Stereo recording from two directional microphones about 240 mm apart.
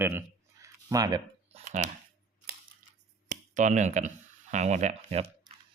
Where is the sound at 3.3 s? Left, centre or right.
Right.